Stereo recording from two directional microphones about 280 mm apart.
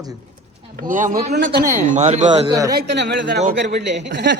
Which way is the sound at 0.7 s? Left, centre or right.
Right.